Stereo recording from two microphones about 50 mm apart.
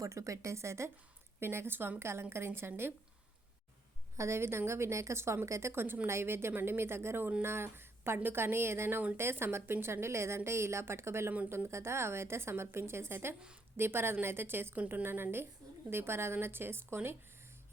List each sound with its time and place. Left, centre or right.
0.1 s speech: right
1.4 s a woman's voice: right
2.0 s a woman's voice: right
4.2 s a woman's voice: right
14.8 s a woman's voice: right